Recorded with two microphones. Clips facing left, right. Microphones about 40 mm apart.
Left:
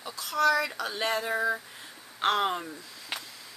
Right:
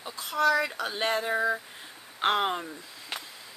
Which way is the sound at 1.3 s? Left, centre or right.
Centre.